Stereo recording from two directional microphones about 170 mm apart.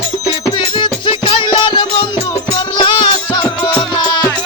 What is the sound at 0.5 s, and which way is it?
Music, 30° left (ahead or behind).